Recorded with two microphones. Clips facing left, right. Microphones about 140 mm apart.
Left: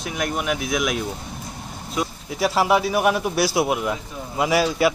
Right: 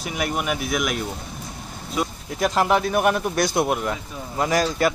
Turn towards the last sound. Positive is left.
turn(degrees=5)  # may be behind; listen again after turning